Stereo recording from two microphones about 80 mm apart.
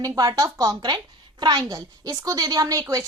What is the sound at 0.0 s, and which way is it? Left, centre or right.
A woman's voice, right.